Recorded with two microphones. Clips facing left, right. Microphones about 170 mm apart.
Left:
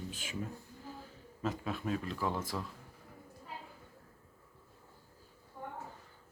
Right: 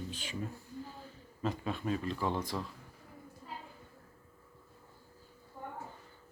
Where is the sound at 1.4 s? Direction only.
5° left (ahead or behind).